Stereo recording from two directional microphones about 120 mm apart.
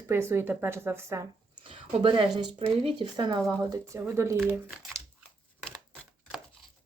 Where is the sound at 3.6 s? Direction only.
25° right (ahead or behind).